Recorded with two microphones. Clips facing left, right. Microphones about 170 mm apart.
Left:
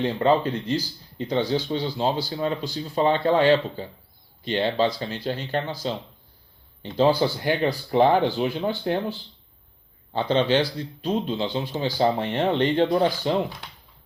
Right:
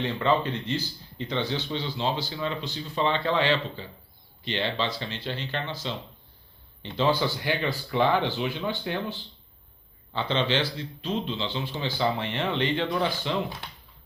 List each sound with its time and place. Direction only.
0.0 s speech: 40° left (ahead or behind)
6.8 s speech: 40° left (ahead or behind)